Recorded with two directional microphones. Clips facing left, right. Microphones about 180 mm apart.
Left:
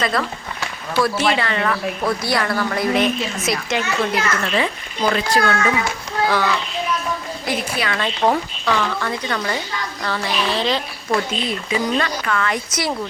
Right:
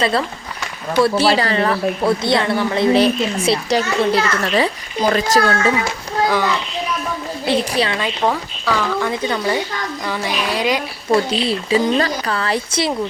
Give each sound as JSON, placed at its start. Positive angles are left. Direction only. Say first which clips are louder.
{"t": 0.0, "sound": "a woman's voice", "louder": "right 3 dB", "side_deg": -30}
{"t": 6.2, "sound": "a child's voice", "louder": "right 1 dB", "side_deg": -15}
{"t": 7.4, "sound": "a woman's voice", "louder": "right 6 dB", "side_deg": -30}
{"t": 8.6, "sound": "speech", "louder": "right 4 dB", "side_deg": -10}
{"t": 11.1, "sound": "a woman's voice", "louder": "right 5 dB", "side_deg": -35}